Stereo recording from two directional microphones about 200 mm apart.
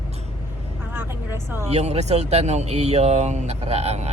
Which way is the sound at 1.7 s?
35° right (ahead or behind).